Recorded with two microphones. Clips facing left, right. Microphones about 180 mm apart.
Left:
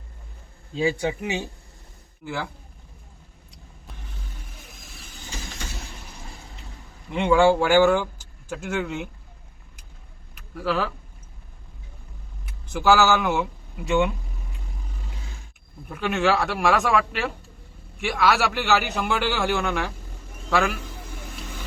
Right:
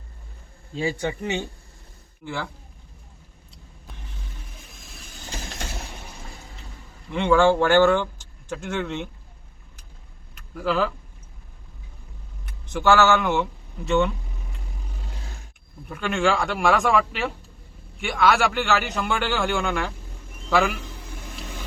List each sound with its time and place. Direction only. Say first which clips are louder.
1.0 s a man's voice: even; 10° left (ahead or behind)
7.1 s speech: even; 15° left (ahead or behind)
10.3 s a sound: right 1 dB; centre (ahead or behind)
12.5 s speech: even; 5° left (ahead or behind)
15.9 s a man's voice: even; 5° left (ahead or behind)